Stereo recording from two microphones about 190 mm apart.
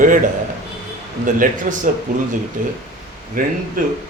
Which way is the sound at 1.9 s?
45° right (ahead or behind).